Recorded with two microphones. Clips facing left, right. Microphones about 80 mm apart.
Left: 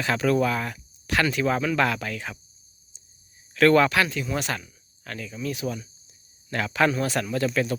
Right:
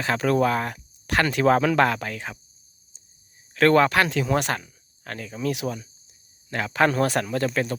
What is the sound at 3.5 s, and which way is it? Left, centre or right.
Speech, right.